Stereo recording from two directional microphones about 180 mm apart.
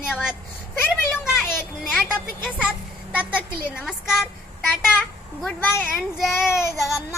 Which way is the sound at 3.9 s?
Centre (ahead or behind).